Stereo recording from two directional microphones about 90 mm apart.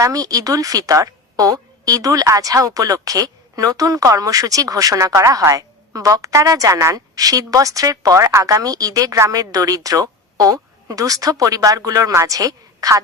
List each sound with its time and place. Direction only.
0.0 s a woman's voice: 40° right (ahead or behind)